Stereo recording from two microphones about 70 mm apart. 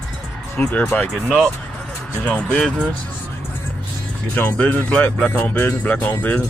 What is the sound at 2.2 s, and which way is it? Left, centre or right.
Speech, centre.